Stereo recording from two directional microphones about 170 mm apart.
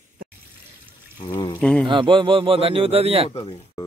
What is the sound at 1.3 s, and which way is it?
Speech, 25° left (ahead or behind).